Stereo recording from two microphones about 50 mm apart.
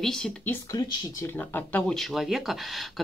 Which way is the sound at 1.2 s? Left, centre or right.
Left.